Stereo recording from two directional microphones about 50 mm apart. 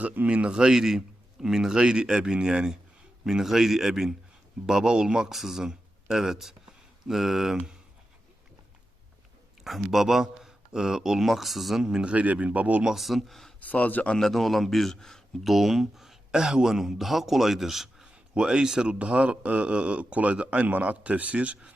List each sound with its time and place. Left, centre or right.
0.0 s a man's voice: right
5.3 s speech: centre
9.6 s a man's voice: centre
11.8 s a man's voice: centre
12.1 s speech: right
12.8 s speech: centre
13.6 s speech: left
14.2 s speech: centre
15.5 s speech: centre
18.0 s a sound: centre
18.9 s speech: right